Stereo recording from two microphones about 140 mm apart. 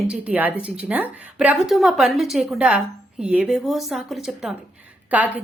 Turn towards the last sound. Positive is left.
turn(degrees=-10)  # may be behind; listen again after turning